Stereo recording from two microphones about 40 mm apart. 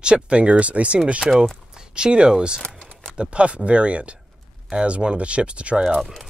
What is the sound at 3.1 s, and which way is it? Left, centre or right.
Speech, right.